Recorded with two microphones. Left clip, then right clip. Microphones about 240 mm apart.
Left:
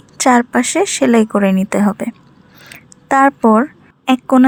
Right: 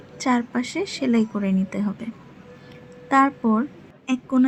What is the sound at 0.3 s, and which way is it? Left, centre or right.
A woman's voice, left.